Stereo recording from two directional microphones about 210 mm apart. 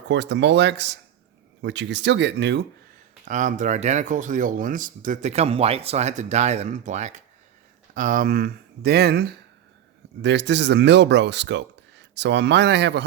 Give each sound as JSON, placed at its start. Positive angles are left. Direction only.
{"t": 0.1, "sound": "speech", "side_deg": -55}
{"t": 3.2, "sound": "speech", "side_deg": -35}